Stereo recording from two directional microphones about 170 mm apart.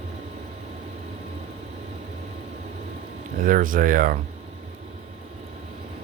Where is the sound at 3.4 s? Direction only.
55° right (ahead or behind).